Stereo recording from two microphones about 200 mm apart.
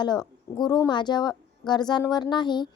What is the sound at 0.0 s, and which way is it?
Speech, 20° left (ahead or behind).